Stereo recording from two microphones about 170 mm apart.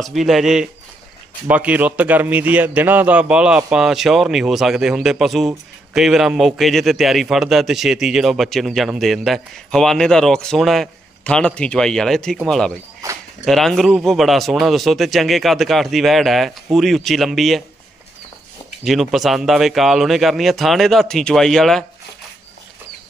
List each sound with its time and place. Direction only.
0.0 s a man's voice: centre (ahead or behind)
13.0 s a sound: 20° right (ahead or behind)
13.5 s a man's voice: centre (ahead or behind)
18.9 s a man's voice: centre (ahead or behind)